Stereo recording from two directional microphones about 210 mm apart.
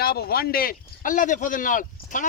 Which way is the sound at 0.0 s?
50° left (ahead or behind).